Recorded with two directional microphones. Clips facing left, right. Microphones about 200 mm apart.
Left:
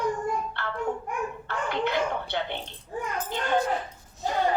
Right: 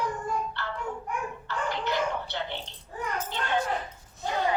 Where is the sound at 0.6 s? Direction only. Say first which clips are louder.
Left 4 dB; 55° left (ahead or behind).